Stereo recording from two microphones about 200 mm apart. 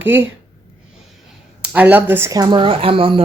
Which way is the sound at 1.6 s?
10° right (ahead or behind).